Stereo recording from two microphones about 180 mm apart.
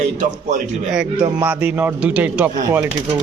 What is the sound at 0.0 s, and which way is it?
Speech, 45° right (ahead or behind).